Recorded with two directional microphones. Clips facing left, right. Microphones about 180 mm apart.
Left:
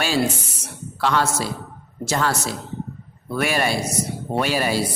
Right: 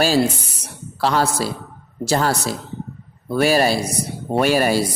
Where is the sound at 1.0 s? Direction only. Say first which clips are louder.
Right 2 dB; 35° right (ahead or behind).